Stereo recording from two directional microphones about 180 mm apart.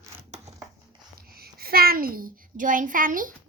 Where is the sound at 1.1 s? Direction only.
55° right (ahead or behind).